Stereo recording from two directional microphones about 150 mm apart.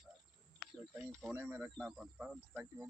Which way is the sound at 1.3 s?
10° right (ahead or behind).